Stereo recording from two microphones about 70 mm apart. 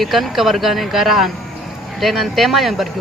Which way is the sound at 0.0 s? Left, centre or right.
Centre.